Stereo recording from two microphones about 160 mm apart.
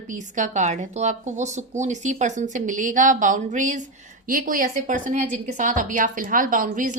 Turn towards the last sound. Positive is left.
turn(degrees=-55)  # may be behind; listen again after turning